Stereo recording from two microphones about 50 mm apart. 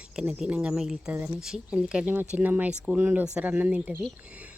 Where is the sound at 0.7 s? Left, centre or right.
Centre.